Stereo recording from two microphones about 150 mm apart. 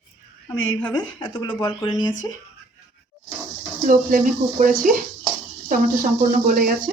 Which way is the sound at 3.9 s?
60° right (ahead or behind).